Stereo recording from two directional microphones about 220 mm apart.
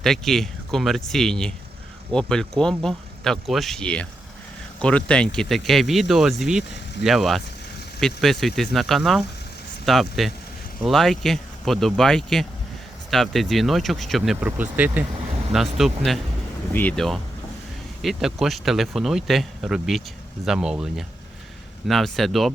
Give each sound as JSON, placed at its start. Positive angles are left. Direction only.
{"t": 0.0, "sound": "speech", "side_deg": 0}